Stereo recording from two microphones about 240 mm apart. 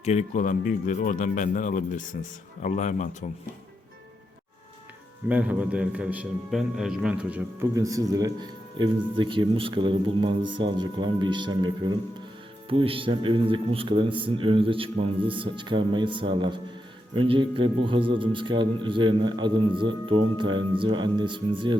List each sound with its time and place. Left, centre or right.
0.0 s speech: left
5.3 s a man's voice: centre